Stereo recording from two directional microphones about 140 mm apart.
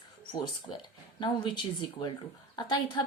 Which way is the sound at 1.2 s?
35° left (ahead or behind).